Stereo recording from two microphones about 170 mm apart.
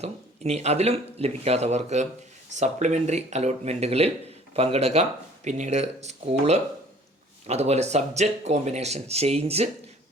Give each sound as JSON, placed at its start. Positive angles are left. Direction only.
{"t": 0.0, "sound": "speech", "side_deg": -40}